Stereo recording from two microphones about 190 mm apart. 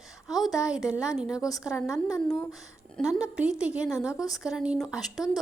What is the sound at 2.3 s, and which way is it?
Speech, 15° left (ahead or behind).